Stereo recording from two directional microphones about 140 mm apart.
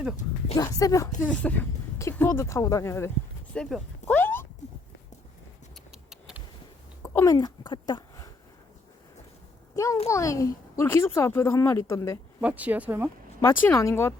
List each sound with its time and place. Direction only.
0.5 s speech: 25° left (ahead or behind)
1.3 s speech: 10° left (ahead or behind)
3.5 s speech: 5° left (ahead or behind)
4.1 s a sound: 15° left (ahead or behind)
5.9 s a sound: 5° right (ahead or behind)
7.0 s a sound: 25° left (ahead or behind)
9.7 s speech: 25° left (ahead or behind)
12.4 s speech: 10° right (ahead or behind)
13.4 s speech: 20° left (ahead or behind)